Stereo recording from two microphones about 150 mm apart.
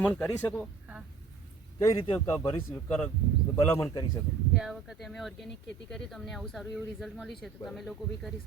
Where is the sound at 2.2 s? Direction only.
20° left (ahead or behind).